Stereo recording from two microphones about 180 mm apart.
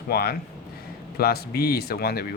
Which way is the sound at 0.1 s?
60° left (ahead or behind).